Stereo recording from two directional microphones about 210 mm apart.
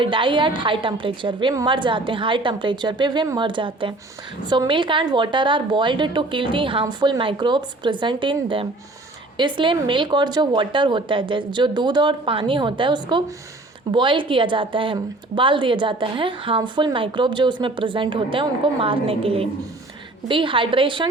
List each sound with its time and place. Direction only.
0.0 s a woman's voice: 25° right (ahead or behind)